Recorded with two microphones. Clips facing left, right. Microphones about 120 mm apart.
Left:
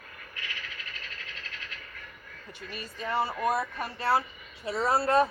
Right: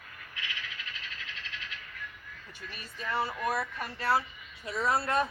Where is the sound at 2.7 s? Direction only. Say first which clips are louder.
Left 3 dB; 40° left (ahead or behind).